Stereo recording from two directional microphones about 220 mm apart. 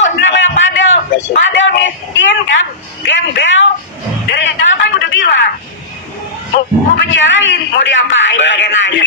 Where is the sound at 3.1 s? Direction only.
55° left (ahead or behind).